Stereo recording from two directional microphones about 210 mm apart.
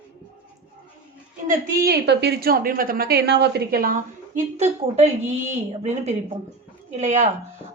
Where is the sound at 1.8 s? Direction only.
50° right (ahead or behind).